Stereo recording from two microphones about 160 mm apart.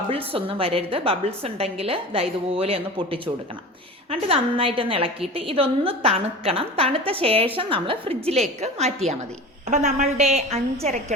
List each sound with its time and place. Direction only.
0.1 s a woman's voice: 35° right (ahead or behind)